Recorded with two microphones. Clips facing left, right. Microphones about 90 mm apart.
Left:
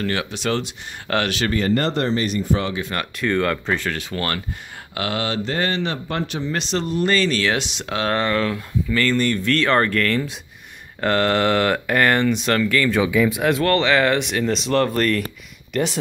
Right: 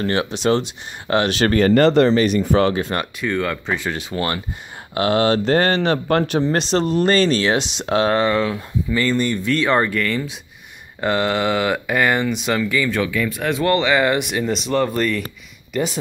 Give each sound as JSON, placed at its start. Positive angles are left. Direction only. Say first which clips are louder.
{"t": 0.0, "sound": "speech", "louder": "right 4 dB", "side_deg": -30}
{"t": 1.5, "sound": "speech", "louder": "right 9 dB", "side_deg": -75}
{"t": 3.2, "sound": "speech", "louder": "left 5 dB", "side_deg": 0}
{"t": 3.8, "sound": "speech", "louder": "right 2 dB", "side_deg": -20}
{"t": 4.9, "sound": "speech", "louder": "right 7 dB", "side_deg": -35}
{"t": 6.3, "sound": "speech", "louder": "right 6 dB", "side_deg": -40}
{"t": 8.1, "sound": "speech", "louder": "right 3 dB", "side_deg": -10}
{"t": 13.0, "sound": "speech", "louder": "left 3 dB", "side_deg": 15}
{"t": 13.7, "sound": "speech", "louder": "right 3 dB", "side_deg": -5}